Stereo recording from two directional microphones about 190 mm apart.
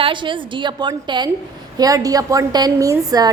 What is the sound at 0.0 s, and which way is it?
A woman's voice, 25° right (ahead or behind).